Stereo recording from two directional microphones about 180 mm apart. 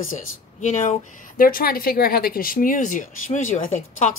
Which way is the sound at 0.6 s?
40° left (ahead or behind).